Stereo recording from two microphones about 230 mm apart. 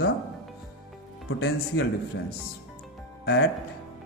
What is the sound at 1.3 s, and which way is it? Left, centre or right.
Speech, left.